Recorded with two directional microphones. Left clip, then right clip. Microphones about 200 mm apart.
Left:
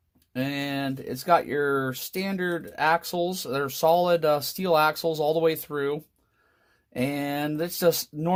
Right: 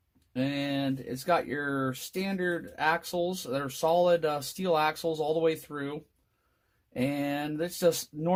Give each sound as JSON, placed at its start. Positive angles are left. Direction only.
{"t": 0.3, "sound": "speech", "side_deg": 35}